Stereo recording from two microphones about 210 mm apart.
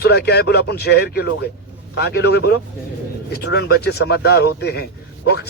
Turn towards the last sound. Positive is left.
turn(degrees=50)  # may be behind; listen again after turning